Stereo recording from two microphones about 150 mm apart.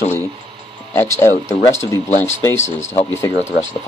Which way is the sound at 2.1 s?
50° left (ahead or behind).